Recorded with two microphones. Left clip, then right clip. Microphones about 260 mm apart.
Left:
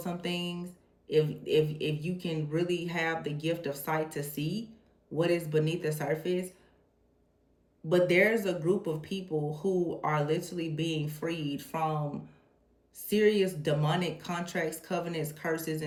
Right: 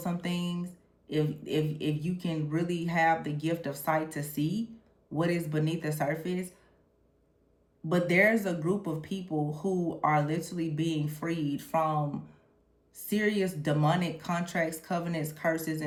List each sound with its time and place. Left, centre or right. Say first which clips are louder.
0.0 s speech: left 1 dB; right
7.9 s speech: even; right